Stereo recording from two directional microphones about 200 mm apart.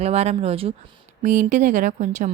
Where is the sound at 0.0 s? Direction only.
30° right (ahead or behind).